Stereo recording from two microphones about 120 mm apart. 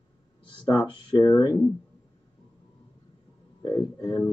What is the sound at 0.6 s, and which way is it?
Speech, 35° left (ahead or behind).